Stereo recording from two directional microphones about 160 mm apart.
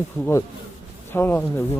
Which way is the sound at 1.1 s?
15° left (ahead or behind).